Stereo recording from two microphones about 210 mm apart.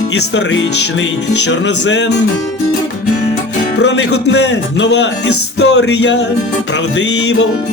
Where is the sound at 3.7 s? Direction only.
55° left (ahead or behind).